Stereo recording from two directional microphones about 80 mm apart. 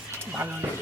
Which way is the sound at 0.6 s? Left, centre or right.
Right.